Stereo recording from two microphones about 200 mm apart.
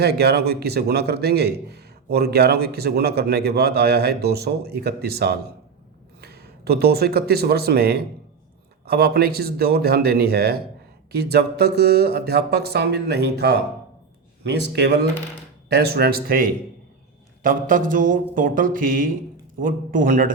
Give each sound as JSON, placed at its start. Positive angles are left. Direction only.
{"t": 0.0, "sound": "a man's voice", "side_deg": -55}